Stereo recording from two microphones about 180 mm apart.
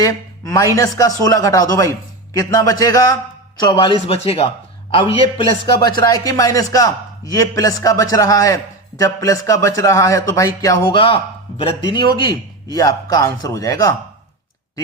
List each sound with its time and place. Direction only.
0.0 s a man's voice: 20° left (ahead or behind)
6.0 s a man's voice: 20° left (ahead or behind)